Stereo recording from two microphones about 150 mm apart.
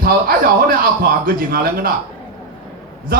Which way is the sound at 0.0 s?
80° right.